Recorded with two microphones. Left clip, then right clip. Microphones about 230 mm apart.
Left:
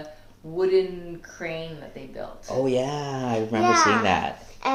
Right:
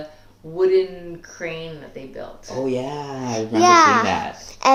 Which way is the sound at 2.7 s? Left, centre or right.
Left.